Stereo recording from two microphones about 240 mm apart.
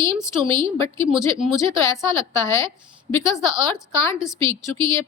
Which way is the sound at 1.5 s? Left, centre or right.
Centre.